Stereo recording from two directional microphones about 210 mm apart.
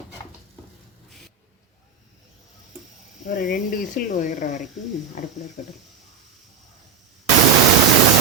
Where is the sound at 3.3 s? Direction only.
40° left (ahead or behind).